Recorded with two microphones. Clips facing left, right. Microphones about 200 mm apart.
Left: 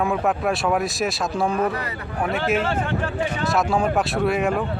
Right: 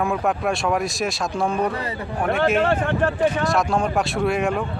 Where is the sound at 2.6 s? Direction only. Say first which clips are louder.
Right 4 dB; 55° right (ahead or behind).